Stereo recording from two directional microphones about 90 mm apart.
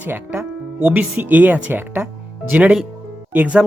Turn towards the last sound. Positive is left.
turn(degrees=-15)  # may be behind; listen again after turning